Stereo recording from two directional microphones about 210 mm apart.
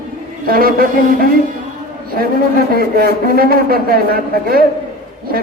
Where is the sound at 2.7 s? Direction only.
45° right (ahead or behind).